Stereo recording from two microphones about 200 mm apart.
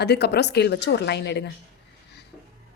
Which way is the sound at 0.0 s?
55° left (ahead or behind).